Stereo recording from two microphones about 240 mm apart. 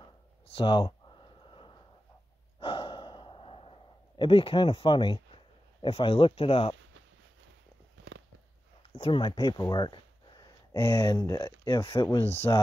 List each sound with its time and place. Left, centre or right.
0.6 s a sound: centre
2.6 s sigh: left
8.9 s speech: centre